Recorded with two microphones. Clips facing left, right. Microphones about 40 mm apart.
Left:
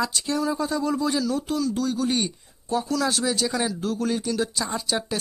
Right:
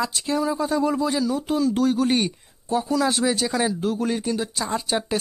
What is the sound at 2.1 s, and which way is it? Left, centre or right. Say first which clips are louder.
Speech: right 3 dB; right.